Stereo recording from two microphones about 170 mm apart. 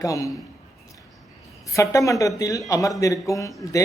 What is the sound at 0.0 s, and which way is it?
Speech, 20° left (ahead or behind).